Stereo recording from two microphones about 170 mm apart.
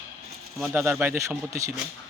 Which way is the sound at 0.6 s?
10° right (ahead or behind).